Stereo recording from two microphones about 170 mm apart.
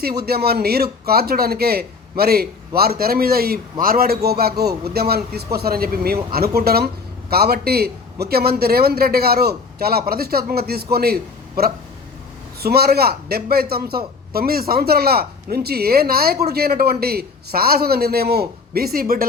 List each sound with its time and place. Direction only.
0.2 s a man's voice: 70° right (ahead or behind)